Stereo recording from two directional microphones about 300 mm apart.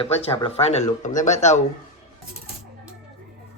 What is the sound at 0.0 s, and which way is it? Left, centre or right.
Speech, centre.